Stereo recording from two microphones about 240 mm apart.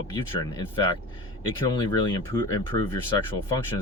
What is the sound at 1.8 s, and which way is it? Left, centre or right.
Speech, centre.